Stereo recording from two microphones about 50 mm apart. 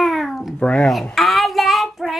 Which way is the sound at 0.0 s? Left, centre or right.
Centre.